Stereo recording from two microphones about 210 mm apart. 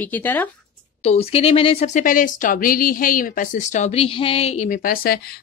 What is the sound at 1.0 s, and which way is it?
Speech, 30° left (ahead or behind).